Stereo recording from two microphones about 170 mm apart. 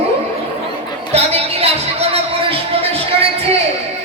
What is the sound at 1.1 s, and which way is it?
Music, 35° right (ahead or behind).